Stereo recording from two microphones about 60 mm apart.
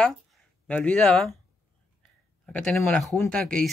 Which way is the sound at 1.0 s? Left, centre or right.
Centre.